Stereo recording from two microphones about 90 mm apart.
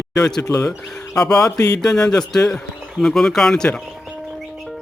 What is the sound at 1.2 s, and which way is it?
Speech, 10° left (ahead or behind).